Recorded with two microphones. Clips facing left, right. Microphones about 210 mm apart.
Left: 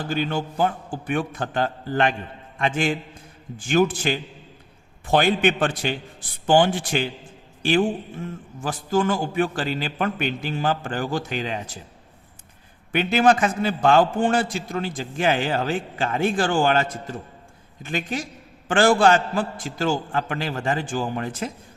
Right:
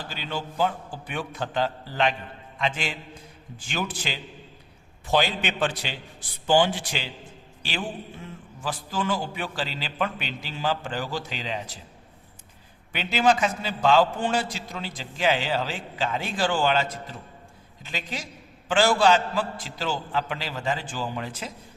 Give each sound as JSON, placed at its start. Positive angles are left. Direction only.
{"t": 0.1, "sound": "a man's voice", "side_deg": 50}
{"t": 12.9, "sound": "a man's voice", "side_deg": 55}